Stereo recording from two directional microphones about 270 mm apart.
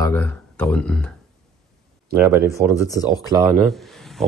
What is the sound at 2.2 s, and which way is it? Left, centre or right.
Speech, centre.